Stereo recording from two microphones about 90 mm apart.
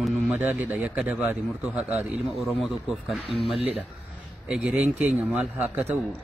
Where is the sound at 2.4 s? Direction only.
Centre (ahead or behind).